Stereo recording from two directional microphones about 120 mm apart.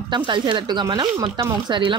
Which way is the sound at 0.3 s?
40° right (ahead or behind).